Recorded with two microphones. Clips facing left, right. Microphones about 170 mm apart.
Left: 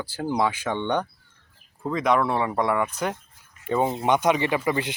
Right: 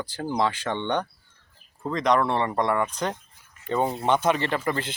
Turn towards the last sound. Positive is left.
turn(degrees=10)  # may be behind; listen again after turning